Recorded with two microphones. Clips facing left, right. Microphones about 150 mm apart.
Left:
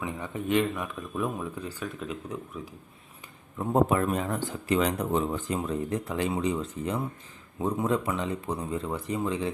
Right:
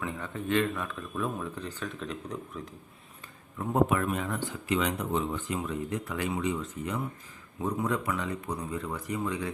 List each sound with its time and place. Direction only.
0.0 s speech: 15° left (ahead or behind)
3.6 s speech: 30° left (ahead or behind)